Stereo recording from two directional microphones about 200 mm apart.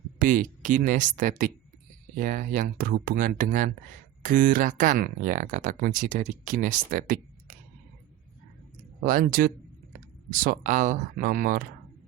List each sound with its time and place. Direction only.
0.2 s speech: 40° right (ahead or behind)
9.0 s speech: 45° right (ahead or behind)